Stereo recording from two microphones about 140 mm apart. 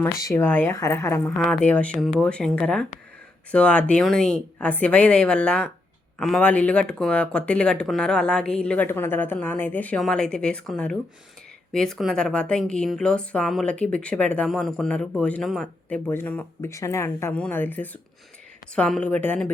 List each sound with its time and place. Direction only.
0.0 s speech: 20° left (ahead or behind)